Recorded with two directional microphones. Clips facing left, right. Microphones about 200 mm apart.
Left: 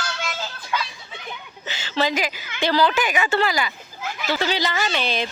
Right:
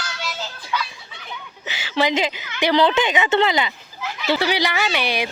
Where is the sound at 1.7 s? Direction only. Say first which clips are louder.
Right 2 dB; 15° right (ahead or behind).